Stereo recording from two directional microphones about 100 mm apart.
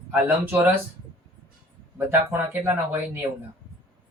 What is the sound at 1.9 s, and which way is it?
Speech, 25° right (ahead or behind).